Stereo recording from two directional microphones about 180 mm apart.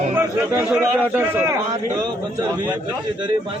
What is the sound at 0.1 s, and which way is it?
Speech, 10° right (ahead or behind).